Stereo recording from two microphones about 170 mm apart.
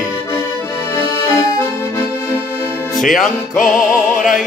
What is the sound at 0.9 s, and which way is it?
Accordion, 20° left (ahead or behind).